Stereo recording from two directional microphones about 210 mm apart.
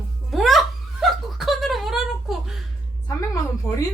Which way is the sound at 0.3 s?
Centre (ahead or behind).